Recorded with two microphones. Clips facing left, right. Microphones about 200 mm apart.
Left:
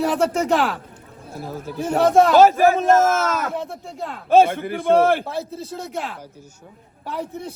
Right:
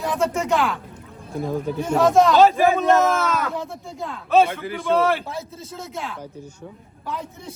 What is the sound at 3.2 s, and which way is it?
A man's voice, 50° left (ahead or behind).